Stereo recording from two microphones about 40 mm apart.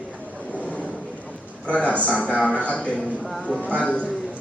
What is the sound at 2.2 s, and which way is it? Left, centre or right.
A woman's voice, left.